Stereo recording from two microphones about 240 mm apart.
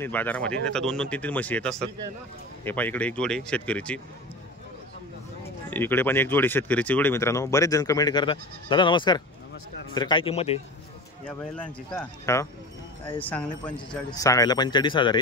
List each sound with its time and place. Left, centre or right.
0.0 s speech: centre
5.7 s a man's voice: centre; by 10.6 s left
11.2 s speech: centre